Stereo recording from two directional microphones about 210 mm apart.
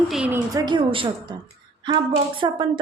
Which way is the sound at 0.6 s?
25° right (ahead or behind).